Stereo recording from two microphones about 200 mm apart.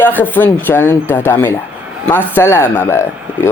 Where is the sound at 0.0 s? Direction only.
10° left (ahead or behind).